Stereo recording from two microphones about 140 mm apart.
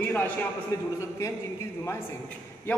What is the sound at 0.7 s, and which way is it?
Speech, 25° left (ahead or behind).